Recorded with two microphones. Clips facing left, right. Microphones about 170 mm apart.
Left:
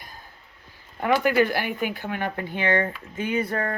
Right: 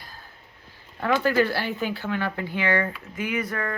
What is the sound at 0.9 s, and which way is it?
Speech, 15° left (ahead or behind).